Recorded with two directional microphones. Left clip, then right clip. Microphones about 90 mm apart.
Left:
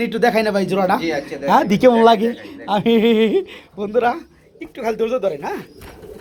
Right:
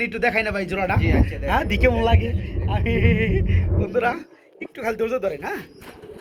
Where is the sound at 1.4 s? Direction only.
30° left (ahead or behind).